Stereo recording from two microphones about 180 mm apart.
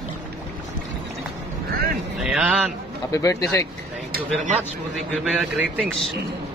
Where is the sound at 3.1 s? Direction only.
15° left (ahead or behind).